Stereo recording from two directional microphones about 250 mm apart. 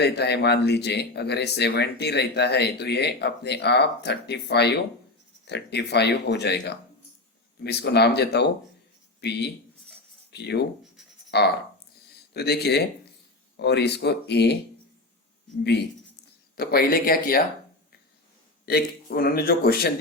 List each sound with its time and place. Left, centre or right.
0.0 s speech: left
16.6 s speech: left
18.6 s speech: left